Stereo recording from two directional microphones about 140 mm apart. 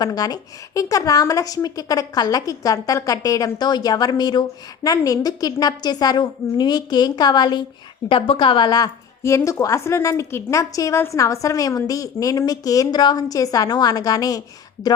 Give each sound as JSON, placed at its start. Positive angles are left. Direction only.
{"t": 0.0, "sound": "a woman's voice", "side_deg": 25}